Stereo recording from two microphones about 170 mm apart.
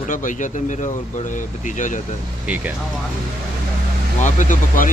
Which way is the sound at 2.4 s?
10° right (ahead or behind).